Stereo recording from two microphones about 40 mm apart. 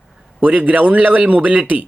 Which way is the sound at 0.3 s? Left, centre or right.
Right.